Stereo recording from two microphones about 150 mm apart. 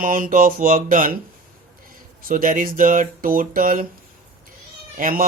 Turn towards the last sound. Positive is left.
turn(degrees=-65)  # may be behind; listen again after turning